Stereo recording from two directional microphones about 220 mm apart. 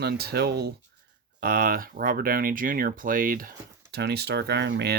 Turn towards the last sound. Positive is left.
turn(degrees=-50)  # may be behind; listen again after turning